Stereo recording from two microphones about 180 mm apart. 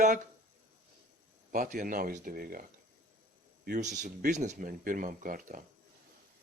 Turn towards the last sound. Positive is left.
turn(degrees=-50)  # may be behind; listen again after turning